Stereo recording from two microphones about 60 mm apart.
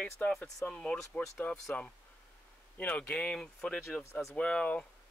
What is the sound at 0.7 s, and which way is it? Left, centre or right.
Speech, centre.